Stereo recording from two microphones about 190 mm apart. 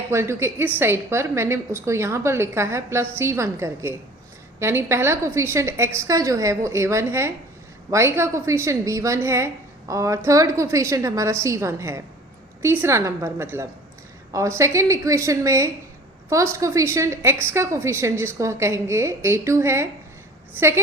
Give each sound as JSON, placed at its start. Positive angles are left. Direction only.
{"t": 0.1, "sound": "a woman's voice", "side_deg": -15}